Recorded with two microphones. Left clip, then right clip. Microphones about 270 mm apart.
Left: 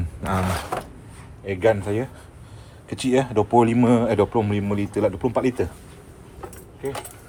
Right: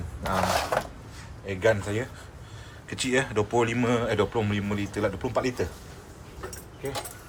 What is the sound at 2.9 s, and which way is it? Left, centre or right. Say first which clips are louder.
Speech: left 5 dB; centre.